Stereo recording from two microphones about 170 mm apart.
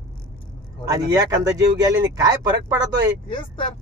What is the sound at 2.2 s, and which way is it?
Speech, 20° right (ahead or behind).